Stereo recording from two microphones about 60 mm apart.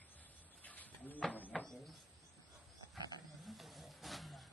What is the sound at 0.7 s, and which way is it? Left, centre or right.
Bird, left.